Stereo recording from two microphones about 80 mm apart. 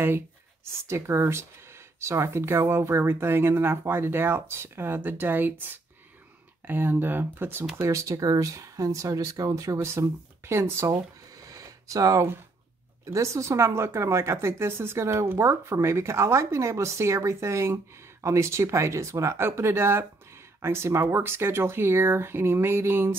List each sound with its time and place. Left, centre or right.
0.7 s speech: right
7.9 s speech: right
10.9 s a sound: right
13.0 s speech: right